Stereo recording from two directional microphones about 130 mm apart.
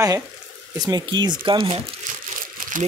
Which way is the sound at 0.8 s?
30° right (ahead or behind).